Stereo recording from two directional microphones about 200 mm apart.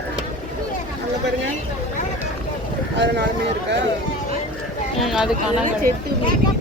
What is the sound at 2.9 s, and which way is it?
Speech, 60° right (ahead or behind).